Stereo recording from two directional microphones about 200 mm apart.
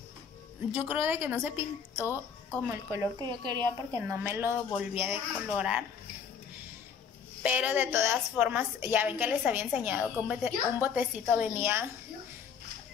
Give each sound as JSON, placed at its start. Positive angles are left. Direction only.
{"t": 0.7, "sound": "a woman's voice", "side_deg": -10}
{"t": 7.4, "sound": "a woman's voice", "side_deg": -10}